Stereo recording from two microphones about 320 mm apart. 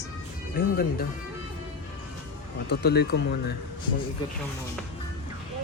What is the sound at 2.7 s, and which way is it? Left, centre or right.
Speech, left.